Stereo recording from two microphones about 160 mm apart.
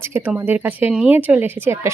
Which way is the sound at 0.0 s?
15° right (ahead or behind).